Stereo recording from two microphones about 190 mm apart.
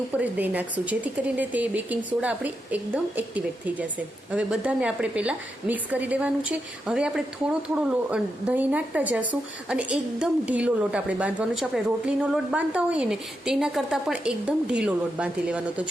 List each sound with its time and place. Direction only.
0.1 s a woman's voice: 10° right (ahead or behind)